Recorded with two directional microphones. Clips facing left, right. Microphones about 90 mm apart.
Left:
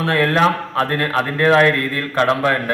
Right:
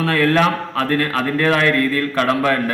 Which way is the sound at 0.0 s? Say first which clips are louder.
Even; 30° left (ahead or behind).